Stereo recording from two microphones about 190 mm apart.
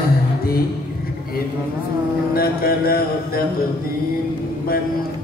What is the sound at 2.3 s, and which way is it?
Music, 50° left (ahead or behind).